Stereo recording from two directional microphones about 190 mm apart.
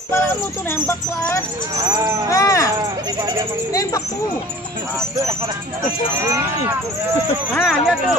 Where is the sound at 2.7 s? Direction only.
20° right (ahead or behind).